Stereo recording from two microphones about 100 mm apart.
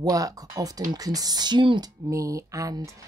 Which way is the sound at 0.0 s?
35° right (ahead or behind).